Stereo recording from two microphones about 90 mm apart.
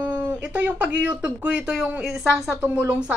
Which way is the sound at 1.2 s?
15° right (ahead or behind).